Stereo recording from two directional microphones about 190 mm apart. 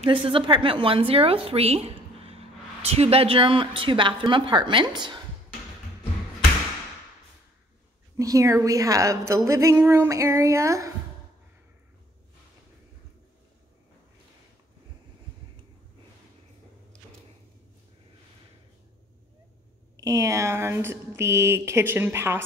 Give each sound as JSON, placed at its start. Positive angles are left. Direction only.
{"t": 0.0, "sound": "a woman's voice", "side_deg": -25}
{"t": 8.2, "sound": "a woman's voice", "side_deg": -15}
{"t": 20.0, "sound": "a woman's voice", "side_deg": -15}